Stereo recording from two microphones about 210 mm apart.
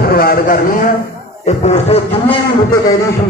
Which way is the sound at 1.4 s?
30° left (ahead or behind).